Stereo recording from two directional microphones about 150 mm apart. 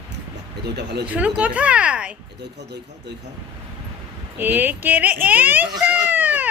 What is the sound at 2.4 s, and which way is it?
Speech, 90° right.